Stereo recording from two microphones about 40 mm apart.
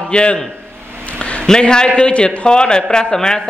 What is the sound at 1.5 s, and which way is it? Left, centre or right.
A man's voice, left.